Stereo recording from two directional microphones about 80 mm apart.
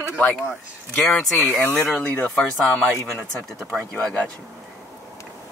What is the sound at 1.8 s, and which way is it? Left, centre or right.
Speech, centre.